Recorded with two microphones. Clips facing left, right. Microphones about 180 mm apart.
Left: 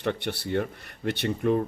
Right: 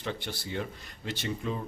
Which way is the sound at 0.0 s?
65° left (ahead or behind).